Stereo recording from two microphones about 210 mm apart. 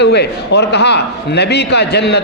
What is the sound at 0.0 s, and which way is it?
A man's voice, 55° left (ahead or behind).